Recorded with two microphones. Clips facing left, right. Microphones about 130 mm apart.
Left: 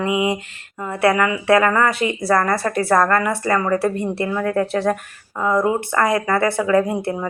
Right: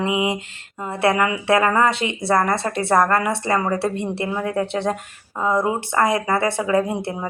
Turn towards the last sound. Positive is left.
turn(degrees=-25)  # may be behind; listen again after turning